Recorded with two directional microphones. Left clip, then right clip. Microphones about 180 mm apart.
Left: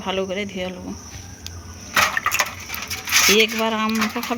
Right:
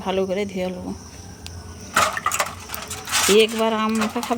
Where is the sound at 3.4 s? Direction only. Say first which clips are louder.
Right 1 dB; 10° right (ahead or behind).